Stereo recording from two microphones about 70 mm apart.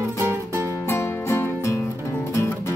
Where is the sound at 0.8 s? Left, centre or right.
Left.